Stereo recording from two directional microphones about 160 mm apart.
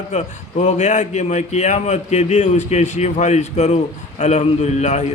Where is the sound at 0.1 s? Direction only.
45° left (ahead or behind).